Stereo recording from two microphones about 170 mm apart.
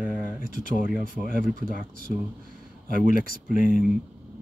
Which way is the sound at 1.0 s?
55° right (ahead or behind).